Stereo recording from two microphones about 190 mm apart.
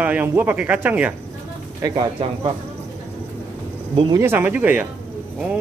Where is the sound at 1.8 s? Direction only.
25° right (ahead or behind).